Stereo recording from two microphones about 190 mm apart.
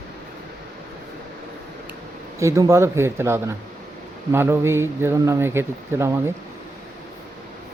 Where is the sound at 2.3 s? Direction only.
15° right (ahead or behind).